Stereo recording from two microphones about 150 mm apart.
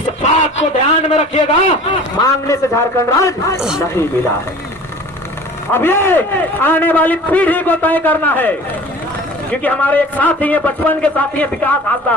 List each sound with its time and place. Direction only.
0.2 s a man's voice: 45° left (ahead or behind)
2.5 s a man's voice: 20° left (ahead or behind)
5.7 s a man's voice: 15° left (ahead or behind)